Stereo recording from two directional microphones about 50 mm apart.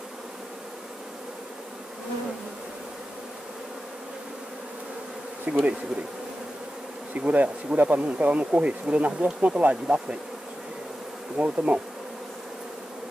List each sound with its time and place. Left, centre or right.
5.5 s speech: right
7.2 s speech: right
11.3 s speech: right